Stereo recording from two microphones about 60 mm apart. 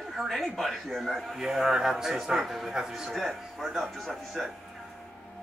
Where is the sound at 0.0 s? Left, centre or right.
Centre.